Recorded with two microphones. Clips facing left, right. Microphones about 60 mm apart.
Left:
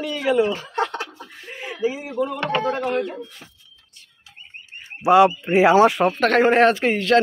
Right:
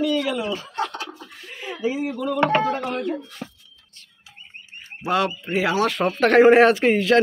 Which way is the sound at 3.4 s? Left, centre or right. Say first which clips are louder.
Right 10 dB; right.